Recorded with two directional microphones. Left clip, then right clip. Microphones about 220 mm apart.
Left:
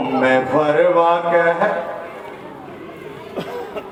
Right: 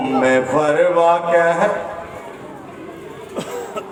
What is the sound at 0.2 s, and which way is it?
Speech, 50° right (ahead or behind).